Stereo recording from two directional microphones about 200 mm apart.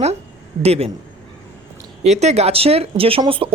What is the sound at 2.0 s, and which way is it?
Speech, 35° right (ahead or behind).